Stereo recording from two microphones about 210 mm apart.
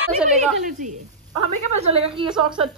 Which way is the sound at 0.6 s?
35° right (ahead or behind).